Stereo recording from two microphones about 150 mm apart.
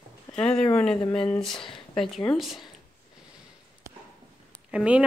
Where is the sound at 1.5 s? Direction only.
35° left (ahead or behind).